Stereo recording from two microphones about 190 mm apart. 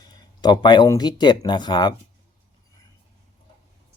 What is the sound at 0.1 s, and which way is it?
Speech, 20° left (ahead or behind).